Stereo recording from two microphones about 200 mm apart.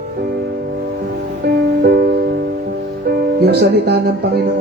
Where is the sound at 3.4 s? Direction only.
55° right (ahead or behind).